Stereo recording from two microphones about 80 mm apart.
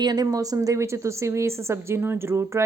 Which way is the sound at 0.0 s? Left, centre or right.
Right.